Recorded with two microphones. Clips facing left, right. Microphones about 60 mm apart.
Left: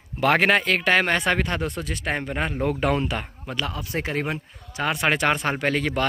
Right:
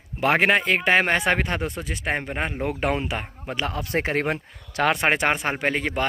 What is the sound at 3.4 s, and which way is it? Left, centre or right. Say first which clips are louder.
Speech: right 3 dB; right.